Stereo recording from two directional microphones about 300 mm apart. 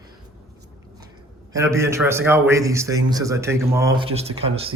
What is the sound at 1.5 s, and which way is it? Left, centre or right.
A man's voice, centre.